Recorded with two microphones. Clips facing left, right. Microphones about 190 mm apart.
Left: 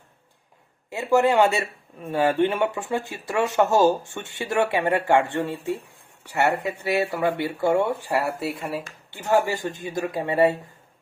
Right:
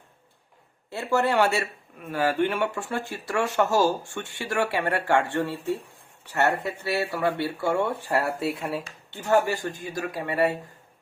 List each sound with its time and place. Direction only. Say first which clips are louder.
0.9 s speech: left 4 dB; 15° left (ahead or behind)
9.1 s speech: left 1 dB; 20° left (ahead or behind)